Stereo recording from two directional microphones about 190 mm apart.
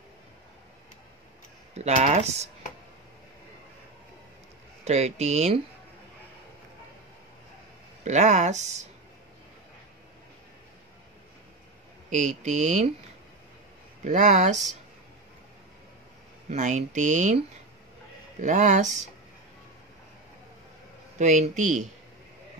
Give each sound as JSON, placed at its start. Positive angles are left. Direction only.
{"t": 1.8, "sound": "speech", "side_deg": -35}
{"t": 4.8, "sound": "speech", "side_deg": -35}
{"t": 8.0, "sound": "speech", "side_deg": -40}
{"t": 12.1, "sound": "speech", "side_deg": -40}
{"t": 14.0, "sound": "speech", "side_deg": -40}
{"t": 16.4, "sound": "speech", "side_deg": -40}
{"t": 18.4, "sound": "speech", "side_deg": -40}
{"t": 21.2, "sound": "speech", "side_deg": -40}